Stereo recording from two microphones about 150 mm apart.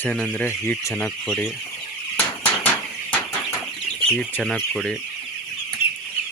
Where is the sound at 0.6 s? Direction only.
20° left (ahead or behind).